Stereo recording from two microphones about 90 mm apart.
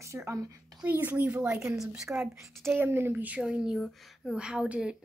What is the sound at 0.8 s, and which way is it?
Speech, 20° right (ahead or behind).